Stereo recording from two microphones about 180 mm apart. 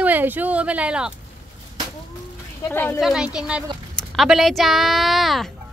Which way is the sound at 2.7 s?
10° left (ahead or behind).